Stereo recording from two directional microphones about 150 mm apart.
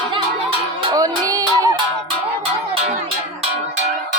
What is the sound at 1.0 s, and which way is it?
Music, 25° right (ahead or behind).